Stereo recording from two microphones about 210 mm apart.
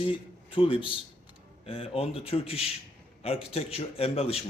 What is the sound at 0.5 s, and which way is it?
A man's voice, 25° left (ahead or behind).